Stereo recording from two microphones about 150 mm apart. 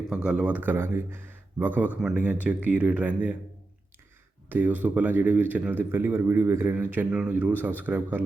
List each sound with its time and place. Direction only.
0.3 s speech: 10° right (ahead or behind)
4.4 s speech: 10° right (ahead or behind)